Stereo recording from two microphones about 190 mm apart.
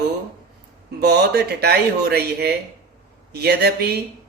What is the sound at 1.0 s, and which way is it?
Mantra, 60° right (ahead or behind).